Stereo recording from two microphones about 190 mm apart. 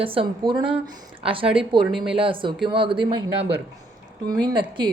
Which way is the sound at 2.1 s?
25° right (ahead or behind).